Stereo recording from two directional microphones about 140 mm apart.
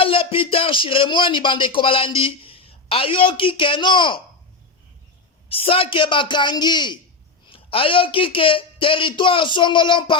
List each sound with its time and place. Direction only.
0.0 s speech: 40° left (ahead or behind)
5.5 s speech: 40° left (ahead or behind)